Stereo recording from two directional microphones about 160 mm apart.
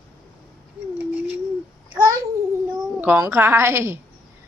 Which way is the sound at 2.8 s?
10° right (ahead or behind).